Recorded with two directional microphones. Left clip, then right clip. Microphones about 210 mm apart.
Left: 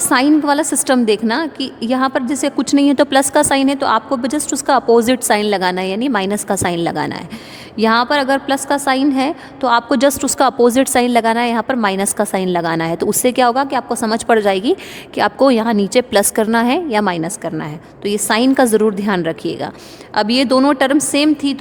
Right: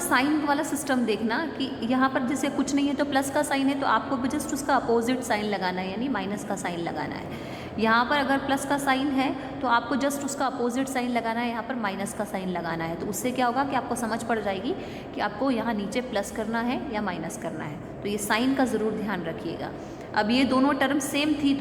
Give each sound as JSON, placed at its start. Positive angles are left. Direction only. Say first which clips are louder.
{"t": 0.1, "sound": "a woman's voice", "louder": "left 11 dB", "side_deg": 50}